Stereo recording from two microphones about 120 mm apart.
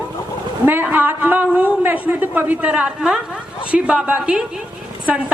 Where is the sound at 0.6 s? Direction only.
15° right (ahead or behind).